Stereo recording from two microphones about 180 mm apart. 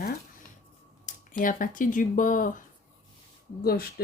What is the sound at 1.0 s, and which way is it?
Speech, 45° left (ahead or behind).